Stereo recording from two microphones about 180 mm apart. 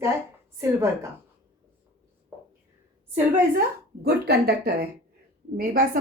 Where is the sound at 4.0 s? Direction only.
60° right (ahead or behind).